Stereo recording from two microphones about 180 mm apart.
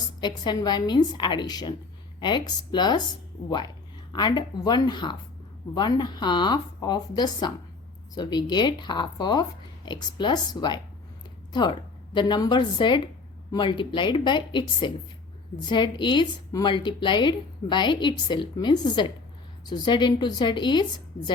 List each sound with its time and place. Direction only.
0.2 s a woman's voice: 25° left (ahead or behind)
4.1 s a woman's voice: 25° left (ahead or behind)